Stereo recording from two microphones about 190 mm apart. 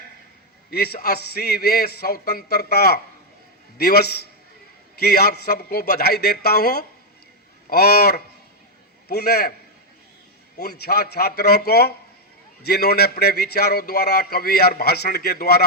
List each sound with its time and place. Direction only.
0.7 s a man's voice: 55° left (ahead or behind)
10.6 s a man's voice: 55° left (ahead or behind)